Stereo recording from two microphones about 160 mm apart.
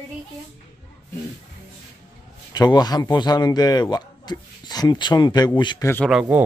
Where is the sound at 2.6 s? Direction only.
25° left (ahead or behind).